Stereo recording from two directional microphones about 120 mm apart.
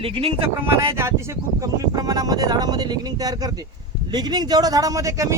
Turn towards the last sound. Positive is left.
turn(degrees=-25)  # may be behind; listen again after turning